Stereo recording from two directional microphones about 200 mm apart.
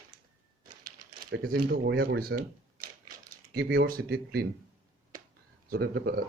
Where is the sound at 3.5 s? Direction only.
55° right (ahead or behind).